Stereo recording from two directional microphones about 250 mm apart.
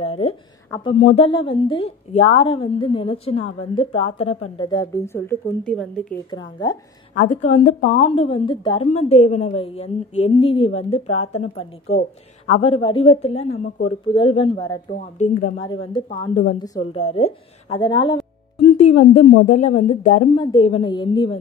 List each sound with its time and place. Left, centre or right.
0.0 s a sound: left
0.7 s speech: centre
0.9 s a woman's voice: left; by 6.1 s centre
6.3 s speech: centre
7.2 s a woman's voice: left
11.4 s speech: left
12.4 s a woman's voice: left
14.9 s speech: left
15.6 s a woman's voice: centre
18.7 s a sound: left
19.2 s a woman's voice: left